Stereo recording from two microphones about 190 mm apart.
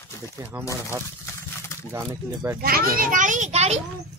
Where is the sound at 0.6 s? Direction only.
15° left (ahead or behind).